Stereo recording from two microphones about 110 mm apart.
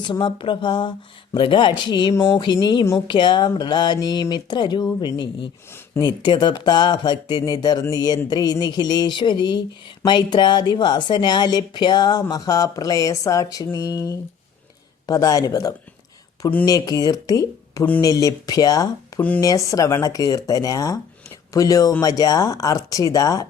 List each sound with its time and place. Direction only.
0.0 s a woman's voice: 45° left (ahead or behind)
13.7 s a sound: 30° left (ahead or behind)
15.0 s a woman's voice: 35° left (ahead or behind)